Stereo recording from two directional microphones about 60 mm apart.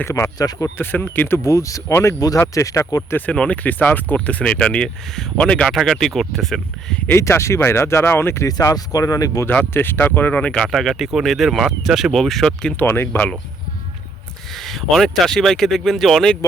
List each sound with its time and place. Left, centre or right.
0.0 s speech: left
0.3 s speech: left
0.8 s speech: left
1.5 s speech: left
3.3 s speech: left
5.7 s speech: centre
7.2 s speech: left
8.4 s speech: left
9.7 s speech: left
10.7 s speech: centre
12.8 s speech: left
14.5 s speech: centre